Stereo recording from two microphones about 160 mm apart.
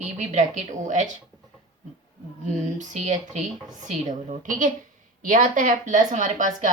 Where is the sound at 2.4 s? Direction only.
50° right (ahead or behind).